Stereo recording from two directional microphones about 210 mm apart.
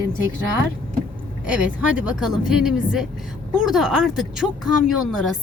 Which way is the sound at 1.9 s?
5° right (ahead or behind).